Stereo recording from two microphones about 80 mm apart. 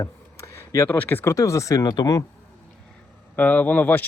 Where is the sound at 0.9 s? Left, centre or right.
Left.